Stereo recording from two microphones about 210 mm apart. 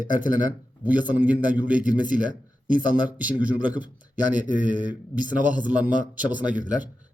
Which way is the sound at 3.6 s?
5° right (ahead or behind).